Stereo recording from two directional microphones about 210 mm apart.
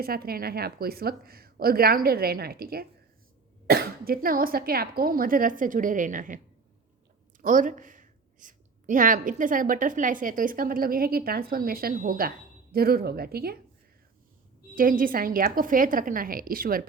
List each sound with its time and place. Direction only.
0.0 s a woman's voice: 45° right (ahead or behind)
7.4 s a woman's voice: 40° right (ahead or behind)
14.8 s a woman's voice: 40° right (ahead or behind)